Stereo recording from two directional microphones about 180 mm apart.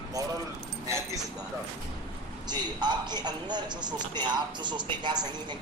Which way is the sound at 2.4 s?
25° right (ahead or behind).